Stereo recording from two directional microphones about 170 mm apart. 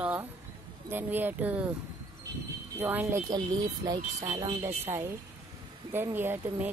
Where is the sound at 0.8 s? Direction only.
10° right (ahead or behind).